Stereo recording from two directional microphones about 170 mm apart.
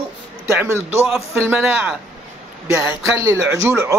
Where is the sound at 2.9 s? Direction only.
15° right (ahead or behind).